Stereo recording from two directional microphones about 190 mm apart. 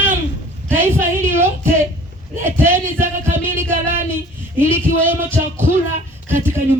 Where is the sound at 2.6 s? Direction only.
10° right (ahead or behind).